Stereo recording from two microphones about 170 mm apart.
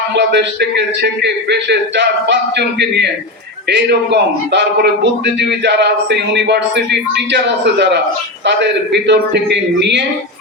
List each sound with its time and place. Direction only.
0.2 s a man's voice: 85° right